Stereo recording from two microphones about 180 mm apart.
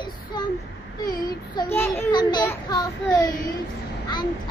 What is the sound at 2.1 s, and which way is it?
A child's voice, 25° left (ahead or behind).